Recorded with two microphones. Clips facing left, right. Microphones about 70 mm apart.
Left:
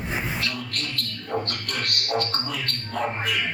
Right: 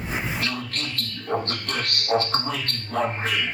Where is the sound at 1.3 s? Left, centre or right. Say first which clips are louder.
Right 2 dB; right.